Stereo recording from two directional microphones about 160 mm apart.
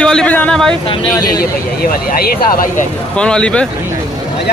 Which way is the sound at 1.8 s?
70° left (ahead or behind).